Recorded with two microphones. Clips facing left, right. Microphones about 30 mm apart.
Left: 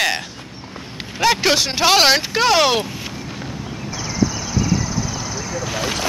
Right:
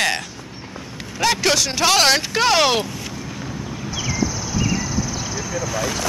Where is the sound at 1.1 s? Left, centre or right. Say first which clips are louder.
Left 2 dB; centre.